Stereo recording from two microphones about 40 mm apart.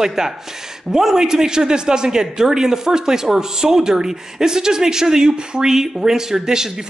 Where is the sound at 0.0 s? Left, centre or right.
Centre.